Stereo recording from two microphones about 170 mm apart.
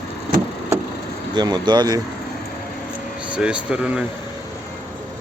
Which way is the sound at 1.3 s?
25° right (ahead or behind).